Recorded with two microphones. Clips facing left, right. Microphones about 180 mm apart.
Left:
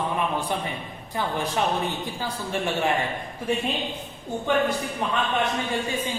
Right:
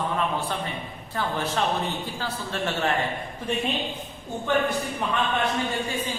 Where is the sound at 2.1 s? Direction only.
15° left (ahead or behind).